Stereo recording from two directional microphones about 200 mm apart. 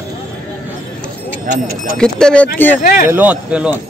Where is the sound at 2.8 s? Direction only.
45° left (ahead or behind).